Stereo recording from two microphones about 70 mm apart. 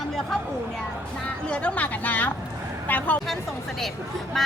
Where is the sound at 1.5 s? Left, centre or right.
Centre.